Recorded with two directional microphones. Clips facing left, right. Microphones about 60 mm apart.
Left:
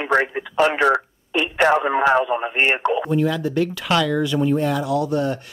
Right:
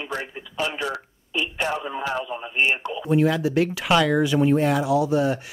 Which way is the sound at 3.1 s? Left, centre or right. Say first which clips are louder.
Even; centre.